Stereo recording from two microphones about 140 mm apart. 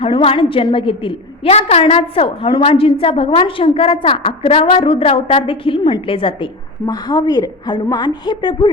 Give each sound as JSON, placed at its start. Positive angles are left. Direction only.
{"t": 0.0, "sound": "a woman's voice", "side_deg": 40}